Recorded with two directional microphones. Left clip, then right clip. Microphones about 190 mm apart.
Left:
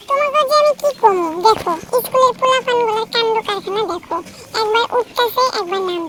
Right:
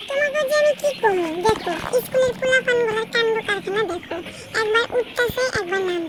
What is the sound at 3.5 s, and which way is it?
Speech, 50° left (ahead or behind).